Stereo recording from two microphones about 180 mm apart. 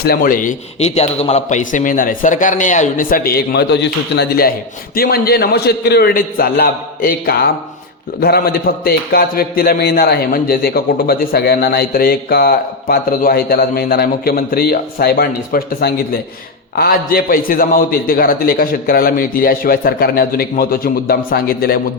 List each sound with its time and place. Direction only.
0.0 s a man's voice: 55° left (ahead or behind)